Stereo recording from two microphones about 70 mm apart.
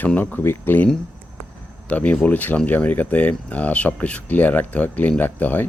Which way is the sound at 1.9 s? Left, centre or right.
Centre.